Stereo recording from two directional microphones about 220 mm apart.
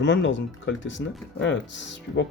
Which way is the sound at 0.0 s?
55° left (ahead or behind).